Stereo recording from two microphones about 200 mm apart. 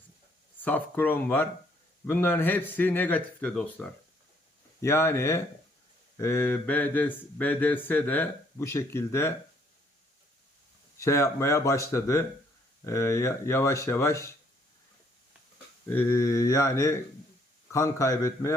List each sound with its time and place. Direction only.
0.6 s speech: 10° left (ahead or behind)
11.0 s speech: 15° left (ahead or behind)
15.9 s speech: 10° left (ahead or behind)